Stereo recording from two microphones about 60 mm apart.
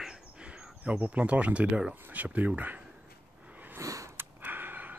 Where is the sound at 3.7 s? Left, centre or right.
Right.